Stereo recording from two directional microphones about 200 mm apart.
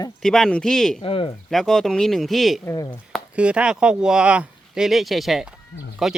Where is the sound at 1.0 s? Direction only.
25° left (ahead or behind).